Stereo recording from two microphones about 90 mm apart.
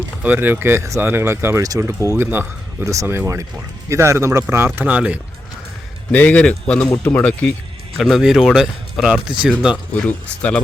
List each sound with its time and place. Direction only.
0.2 s speech: 20° right (ahead or behind)
2.9 s speech: 35° right (ahead or behind)
4.9 s speech: 15° right (ahead or behind)
6.1 s speech: 15° left (ahead or behind)
7.9 s speech: centre (ahead or behind)
9.9 s speech: 15° left (ahead or behind)